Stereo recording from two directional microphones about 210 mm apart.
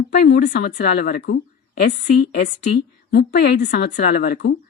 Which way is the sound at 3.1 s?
50° left (ahead or behind).